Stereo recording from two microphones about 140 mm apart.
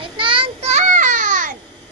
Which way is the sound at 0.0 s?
40° right (ahead or behind).